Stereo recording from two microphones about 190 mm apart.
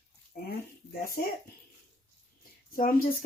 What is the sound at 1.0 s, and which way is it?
Speech, 50° left (ahead or behind).